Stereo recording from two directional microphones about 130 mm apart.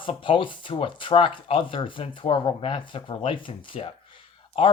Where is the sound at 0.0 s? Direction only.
40° left (ahead or behind).